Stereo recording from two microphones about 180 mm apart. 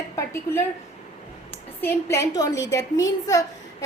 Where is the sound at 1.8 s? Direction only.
15° left (ahead or behind).